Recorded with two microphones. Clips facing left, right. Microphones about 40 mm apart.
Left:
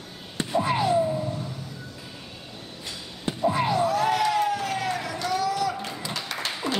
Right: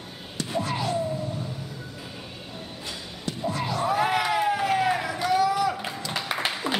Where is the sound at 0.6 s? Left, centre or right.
Left.